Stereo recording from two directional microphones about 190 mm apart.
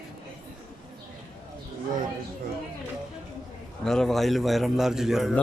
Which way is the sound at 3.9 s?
Centre (ahead or behind).